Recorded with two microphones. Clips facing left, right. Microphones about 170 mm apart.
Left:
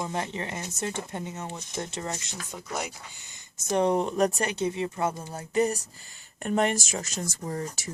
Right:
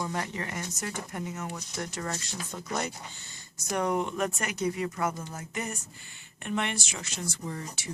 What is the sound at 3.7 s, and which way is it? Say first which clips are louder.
Speech: left 4 dB; 30° left (ahead or behind).